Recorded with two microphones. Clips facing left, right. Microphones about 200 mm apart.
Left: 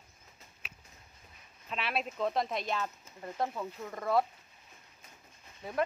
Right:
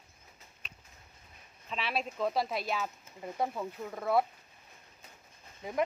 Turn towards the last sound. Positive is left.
turn(degrees=-15)  # may be behind; listen again after turning